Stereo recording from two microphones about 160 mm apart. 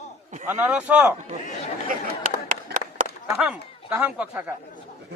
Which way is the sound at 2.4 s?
55° right (ahead or behind).